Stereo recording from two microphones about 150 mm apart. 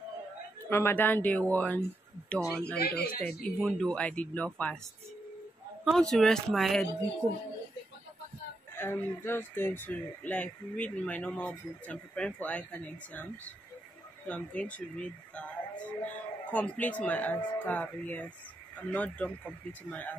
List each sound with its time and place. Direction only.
0.7 s speech: 15° left (ahead or behind)
2.8 s speech: 90° left
3.4 s speech: 5° left (ahead or behind)
5.9 s speech: 5° left (ahead or behind)
8.7 s speech: 15° left (ahead or behind)